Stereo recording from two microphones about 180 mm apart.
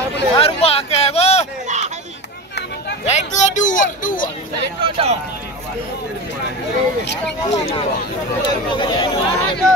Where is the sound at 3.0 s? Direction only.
40° left (ahead or behind).